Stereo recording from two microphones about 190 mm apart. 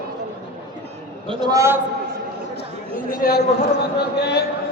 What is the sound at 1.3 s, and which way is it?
Speech, 20° right (ahead or behind).